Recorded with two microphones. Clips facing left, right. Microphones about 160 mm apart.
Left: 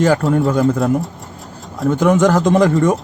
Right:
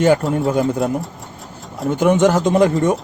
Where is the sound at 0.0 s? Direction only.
Centre (ahead or behind).